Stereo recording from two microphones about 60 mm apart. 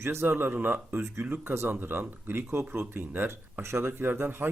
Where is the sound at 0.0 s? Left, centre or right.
Right.